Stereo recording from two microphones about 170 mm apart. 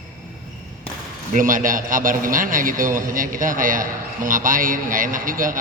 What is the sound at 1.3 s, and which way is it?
A man's voice, 50° right (ahead or behind).